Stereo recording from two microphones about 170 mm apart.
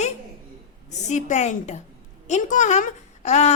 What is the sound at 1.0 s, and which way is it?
A woman's voice, 45° left (ahead or behind).